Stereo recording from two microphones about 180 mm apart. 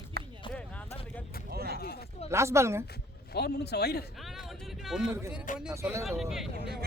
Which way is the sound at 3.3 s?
65° left (ahead or behind).